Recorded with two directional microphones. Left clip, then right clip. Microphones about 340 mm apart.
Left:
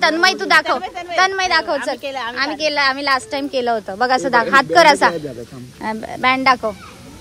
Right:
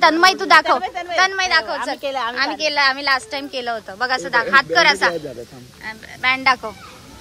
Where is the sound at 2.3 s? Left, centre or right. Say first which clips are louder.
Left 2 dB; centre.